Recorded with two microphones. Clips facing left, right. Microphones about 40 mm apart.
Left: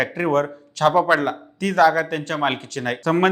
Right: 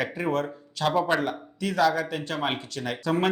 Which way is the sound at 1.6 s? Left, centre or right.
Left.